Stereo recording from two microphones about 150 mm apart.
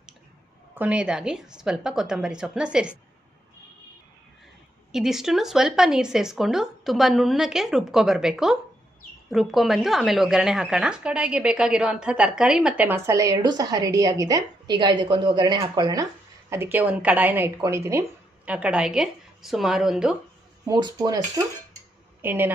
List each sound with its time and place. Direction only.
0.7 s speech: 10° right (ahead or behind)
4.9 s a woman's voice: centre (ahead or behind)
20.6 s speech: 25° right (ahead or behind)
22.2 s a woman's voice: 15° right (ahead or behind)